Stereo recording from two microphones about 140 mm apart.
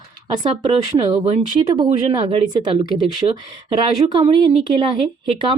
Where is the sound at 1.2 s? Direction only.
60° right (ahead or behind).